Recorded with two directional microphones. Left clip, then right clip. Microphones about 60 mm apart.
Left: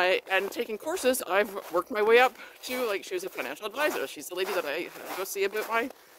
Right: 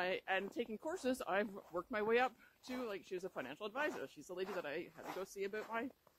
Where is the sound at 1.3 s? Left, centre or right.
Left.